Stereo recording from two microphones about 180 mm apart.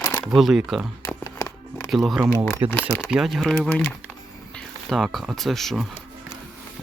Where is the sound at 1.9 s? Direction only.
Centre (ahead or behind).